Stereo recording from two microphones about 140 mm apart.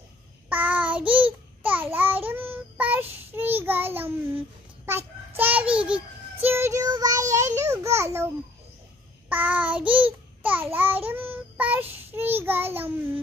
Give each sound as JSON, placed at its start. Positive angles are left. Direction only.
{"t": 0.5, "sound": "child singing", "side_deg": -10}
{"t": 9.3, "sound": "child singing", "side_deg": -10}